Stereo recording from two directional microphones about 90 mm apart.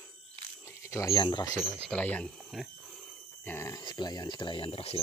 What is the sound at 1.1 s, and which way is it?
Speech, 55° left (ahead or behind).